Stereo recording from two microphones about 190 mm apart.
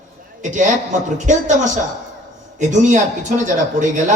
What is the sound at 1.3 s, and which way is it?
Speech, 40° right (ahead or behind).